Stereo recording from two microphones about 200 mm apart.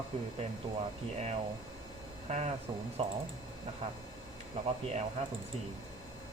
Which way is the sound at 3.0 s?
30° right (ahead or behind).